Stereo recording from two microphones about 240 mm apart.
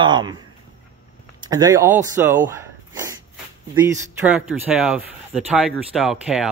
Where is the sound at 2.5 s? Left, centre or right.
Centre.